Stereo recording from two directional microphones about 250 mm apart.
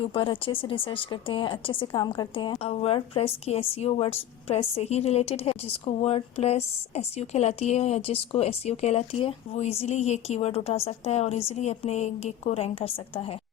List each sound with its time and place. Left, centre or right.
0.0 s speech: left